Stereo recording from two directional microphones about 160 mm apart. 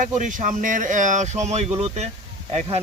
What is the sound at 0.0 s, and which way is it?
Speech, 50° right (ahead or behind).